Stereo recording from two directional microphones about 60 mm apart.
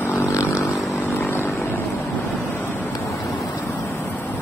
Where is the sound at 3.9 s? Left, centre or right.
Left.